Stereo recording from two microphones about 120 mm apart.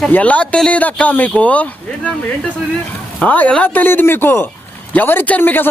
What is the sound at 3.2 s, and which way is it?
Speech, 10° left (ahead or behind).